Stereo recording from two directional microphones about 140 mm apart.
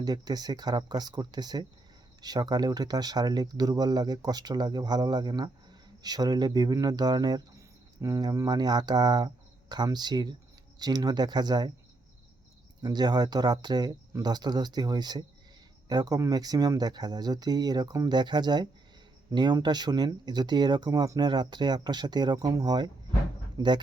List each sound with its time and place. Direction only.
0.0 s speech: 30° right (ahead or behind)
12.8 s speech: 30° right (ahead or behind)